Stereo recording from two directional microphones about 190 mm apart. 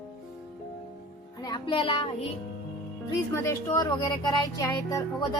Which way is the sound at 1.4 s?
25° left (ahead or behind).